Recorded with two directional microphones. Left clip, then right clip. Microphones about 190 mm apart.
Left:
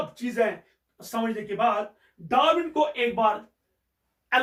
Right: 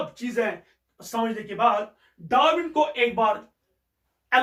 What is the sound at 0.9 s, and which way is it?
A man's voice, 10° left (ahead or behind).